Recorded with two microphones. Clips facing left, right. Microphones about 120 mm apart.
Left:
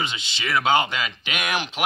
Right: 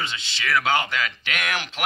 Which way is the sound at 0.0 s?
15° left (ahead or behind).